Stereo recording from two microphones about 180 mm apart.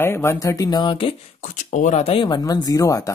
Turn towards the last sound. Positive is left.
turn(degrees=20)  # may be behind; listen again after turning